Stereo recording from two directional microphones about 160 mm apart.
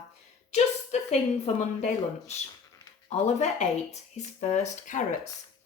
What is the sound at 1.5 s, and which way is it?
Speech, 45° left (ahead or behind).